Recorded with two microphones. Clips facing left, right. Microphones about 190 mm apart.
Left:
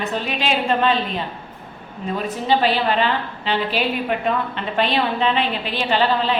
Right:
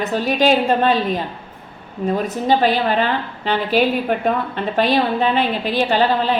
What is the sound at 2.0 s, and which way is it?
A woman's voice, 45° right (ahead or behind).